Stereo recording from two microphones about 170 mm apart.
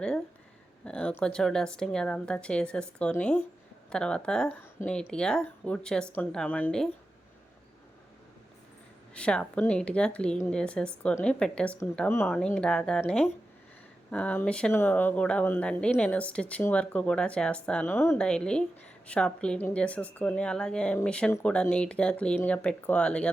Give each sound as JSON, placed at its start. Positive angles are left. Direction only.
{"t": 0.9, "sound": "speech", "side_deg": 5}
{"t": 4.8, "sound": "speech", "side_deg": 50}
{"t": 5.1, "sound": "speech", "side_deg": 5}
{"t": 9.1, "sound": "a woman's voice", "side_deg": 5}